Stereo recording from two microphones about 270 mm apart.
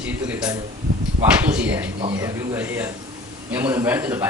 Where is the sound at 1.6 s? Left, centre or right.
Centre.